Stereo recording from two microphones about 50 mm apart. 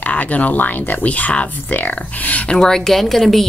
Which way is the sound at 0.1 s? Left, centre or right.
Left.